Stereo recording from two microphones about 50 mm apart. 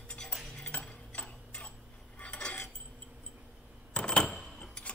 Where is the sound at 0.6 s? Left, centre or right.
Left.